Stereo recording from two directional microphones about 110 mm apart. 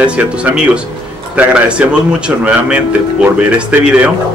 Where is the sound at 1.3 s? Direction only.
10° right (ahead or behind).